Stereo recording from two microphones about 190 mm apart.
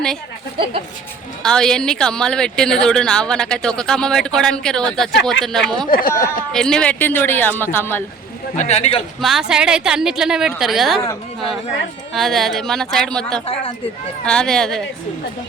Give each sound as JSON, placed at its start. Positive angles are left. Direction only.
{"t": 1.4, "sound": "a woman's voice", "side_deg": 5}
{"t": 5.9, "sound": "speech", "side_deg": 50}
{"t": 6.5, "sound": "a man's voice", "side_deg": 5}
{"t": 8.5, "sound": "a man's voice", "side_deg": 35}
{"t": 9.2, "sound": "a woman's voice", "side_deg": 0}
{"t": 12.1, "sound": "a woman's voice", "side_deg": 0}
{"t": 13.4, "sound": "speech", "side_deg": 30}
{"t": 14.3, "sound": "a woman's voice", "side_deg": 5}